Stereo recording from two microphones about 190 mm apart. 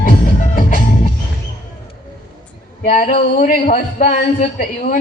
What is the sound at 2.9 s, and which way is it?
Music, 45° left (ahead or behind).